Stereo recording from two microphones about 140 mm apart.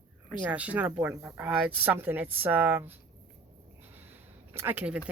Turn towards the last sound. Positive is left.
turn(degrees=-10)  # may be behind; listen again after turning